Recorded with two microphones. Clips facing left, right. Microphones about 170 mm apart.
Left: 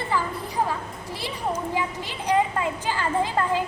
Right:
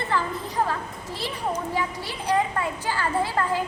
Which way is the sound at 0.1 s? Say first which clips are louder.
Even; 10° left (ahead or behind).